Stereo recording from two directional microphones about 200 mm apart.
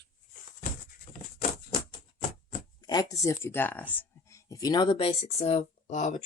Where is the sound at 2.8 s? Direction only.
20° left (ahead or behind).